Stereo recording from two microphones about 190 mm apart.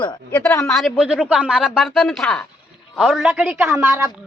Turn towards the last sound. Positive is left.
turn(degrees=-10)  # may be behind; listen again after turning